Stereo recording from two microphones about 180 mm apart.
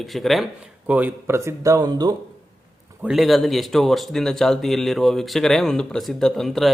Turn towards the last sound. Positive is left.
turn(degrees=0)  # may be behind; listen again after turning